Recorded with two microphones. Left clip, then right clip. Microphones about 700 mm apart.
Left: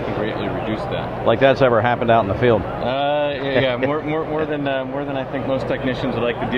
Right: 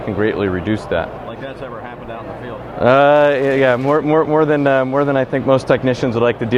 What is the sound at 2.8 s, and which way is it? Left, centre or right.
A man's voice, right.